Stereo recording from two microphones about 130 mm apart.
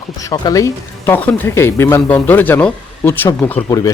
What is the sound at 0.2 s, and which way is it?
Speech, 25° left (ahead or behind).